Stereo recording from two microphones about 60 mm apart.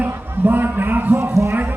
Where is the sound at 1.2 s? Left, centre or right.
Right.